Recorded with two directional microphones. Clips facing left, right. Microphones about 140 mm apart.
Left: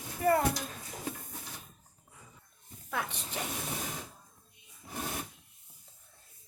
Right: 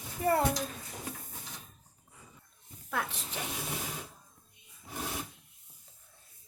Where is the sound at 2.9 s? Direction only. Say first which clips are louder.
Right 1 dB; centre (ahead or behind).